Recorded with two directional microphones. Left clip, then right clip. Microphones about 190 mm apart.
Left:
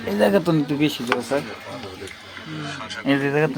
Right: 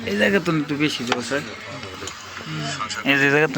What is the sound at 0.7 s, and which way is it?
Speech, 20° left (ahead or behind).